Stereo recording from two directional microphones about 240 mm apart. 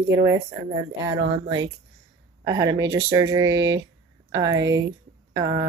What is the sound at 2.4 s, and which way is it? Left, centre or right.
Speech, centre.